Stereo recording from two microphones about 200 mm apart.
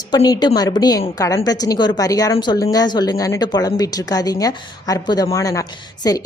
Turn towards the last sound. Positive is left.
turn(degrees=20)  # may be behind; listen again after turning